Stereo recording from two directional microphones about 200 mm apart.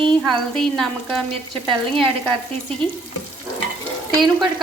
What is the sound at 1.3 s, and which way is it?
Frying, 25° right (ahead or behind).